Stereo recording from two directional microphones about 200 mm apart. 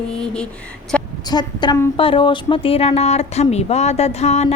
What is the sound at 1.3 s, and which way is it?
Speech, 20° left (ahead or behind).